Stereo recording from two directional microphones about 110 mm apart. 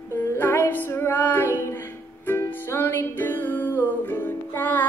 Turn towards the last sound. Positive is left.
turn(degrees=15)  # may be behind; listen again after turning